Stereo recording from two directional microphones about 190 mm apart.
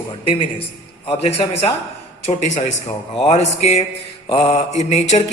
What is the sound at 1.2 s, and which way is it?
Speech, 35° left (ahead or behind).